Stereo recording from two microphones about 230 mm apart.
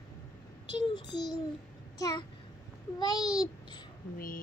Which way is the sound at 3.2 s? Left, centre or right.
Centre.